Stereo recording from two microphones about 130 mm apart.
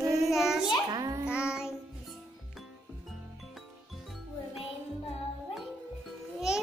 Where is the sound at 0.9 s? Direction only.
25° right (ahead or behind).